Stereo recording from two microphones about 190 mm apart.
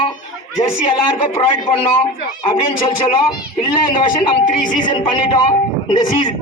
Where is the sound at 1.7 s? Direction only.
30° left (ahead or behind).